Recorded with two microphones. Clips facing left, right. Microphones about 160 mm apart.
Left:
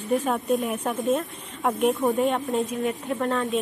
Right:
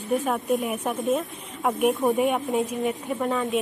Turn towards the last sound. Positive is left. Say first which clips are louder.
# even
turn(degrees=-5)  # may be behind; listen again after turning